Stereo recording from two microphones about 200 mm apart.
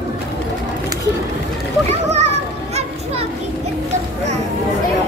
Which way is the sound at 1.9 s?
35° right (ahead or behind).